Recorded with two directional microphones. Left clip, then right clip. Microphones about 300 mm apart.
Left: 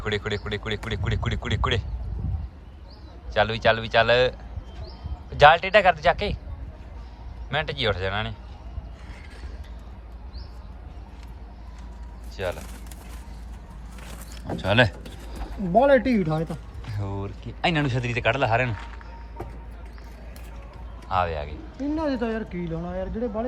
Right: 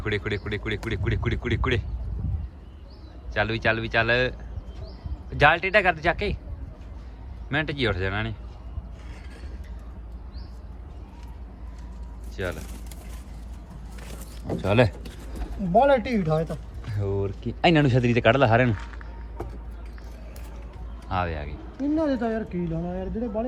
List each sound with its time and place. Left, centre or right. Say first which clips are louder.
0.0 s speech: left 1 dB; centre
3.3 s speech: left 3 dB; centre
5.4 s speech: left 4 dB; centre
7.5 s a man's voice: left 1 dB; centre
12.4 s speech: left 2 dB; centre
14.4 s a sound: left 1 dB; centre
16.2 s speech: right 2 dB; right
17.0 s speech: right 6 dB; right
17.4 s a man's voice: right 4 dB; centre
21.1 s speech: left 4 dB; centre
21.9 s a man's voice: right 1 dB; centre